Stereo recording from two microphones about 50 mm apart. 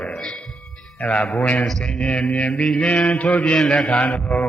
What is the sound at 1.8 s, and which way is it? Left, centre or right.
Speech, left.